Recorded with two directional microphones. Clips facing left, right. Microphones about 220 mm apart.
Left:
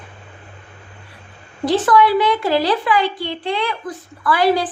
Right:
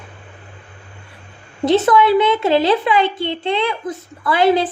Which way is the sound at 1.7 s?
25° right (ahead or behind).